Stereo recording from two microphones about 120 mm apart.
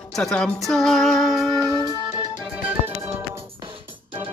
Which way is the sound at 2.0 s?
10° right (ahead or behind).